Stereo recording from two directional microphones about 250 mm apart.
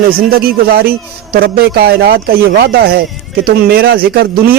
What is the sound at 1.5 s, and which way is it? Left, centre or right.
A man's voice, right.